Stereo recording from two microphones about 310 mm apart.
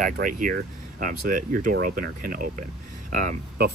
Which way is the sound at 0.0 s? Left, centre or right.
Right.